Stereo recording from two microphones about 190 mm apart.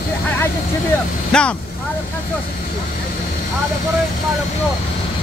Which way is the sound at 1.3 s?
5° left (ahead or behind).